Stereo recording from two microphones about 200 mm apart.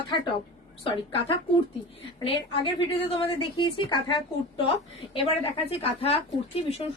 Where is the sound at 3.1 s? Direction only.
25° left (ahead or behind).